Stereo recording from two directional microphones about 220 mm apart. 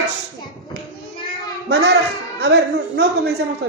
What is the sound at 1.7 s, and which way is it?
A woman's voice, 50° right (ahead or behind).